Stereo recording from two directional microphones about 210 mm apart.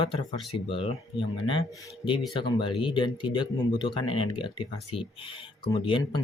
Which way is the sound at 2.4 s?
25° left (ahead or behind).